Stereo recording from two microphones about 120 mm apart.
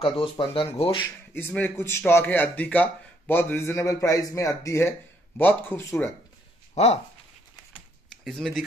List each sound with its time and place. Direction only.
0.0 s speech: 50° left (ahead or behind)
1.3 s a man's voice: 15° left (ahead or behind)
6.7 s a sound: 60° left (ahead or behind)
8.2 s speech: centre (ahead or behind)